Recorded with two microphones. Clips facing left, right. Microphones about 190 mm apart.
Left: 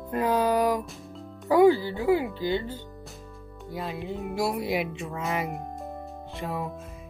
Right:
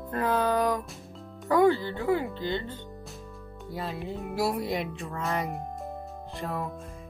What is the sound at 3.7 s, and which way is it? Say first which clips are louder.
Music: left 1 dB; centre (ahead or behind).